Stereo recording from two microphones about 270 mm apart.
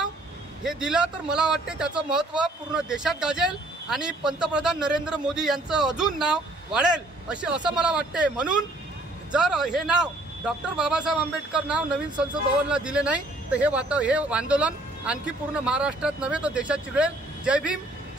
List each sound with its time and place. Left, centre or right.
0.7 s speech: centre